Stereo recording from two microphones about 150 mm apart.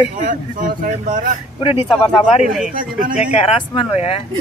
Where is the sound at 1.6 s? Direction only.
40° left (ahead or behind).